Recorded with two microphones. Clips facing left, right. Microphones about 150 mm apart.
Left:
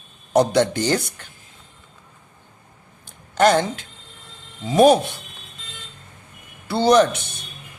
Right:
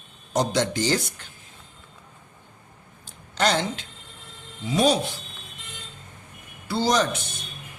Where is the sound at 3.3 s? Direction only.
50° left (ahead or behind).